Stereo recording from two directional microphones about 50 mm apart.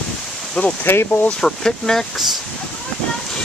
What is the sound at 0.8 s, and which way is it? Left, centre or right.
Speech, left.